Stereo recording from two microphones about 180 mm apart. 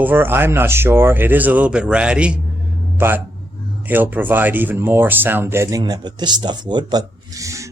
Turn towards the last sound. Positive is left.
turn(degrees=-15)  # may be behind; listen again after turning